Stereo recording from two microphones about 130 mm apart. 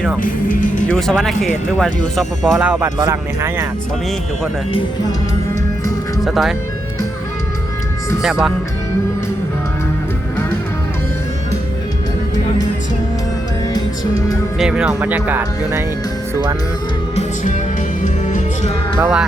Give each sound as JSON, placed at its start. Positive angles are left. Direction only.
{"t": 0.2, "sound": "speech", "side_deg": 90}
{"t": 0.9, "sound": "speech", "side_deg": 5}
{"t": 3.0, "sound": "speech", "side_deg": -25}
{"t": 6.2, "sound": "speech", "side_deg": 0}
{"t": 8.2, "sound": "speech", "side_deg": -5}
{"t": 14.6, "sound": "speech", "side_deg": -5}
{"t": 17.2, "sound": "music", "side_deg": 70}
{"t": 18.9, "sound": "speech", "side_deg": -10}